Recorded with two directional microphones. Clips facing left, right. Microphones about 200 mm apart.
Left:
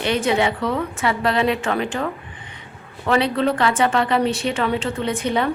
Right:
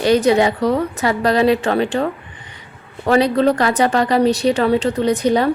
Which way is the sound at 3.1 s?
40° right (ahead or behind).